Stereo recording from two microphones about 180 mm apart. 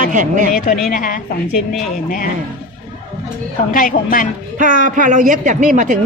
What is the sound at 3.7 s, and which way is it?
Speech, 50° left (ahead or behind).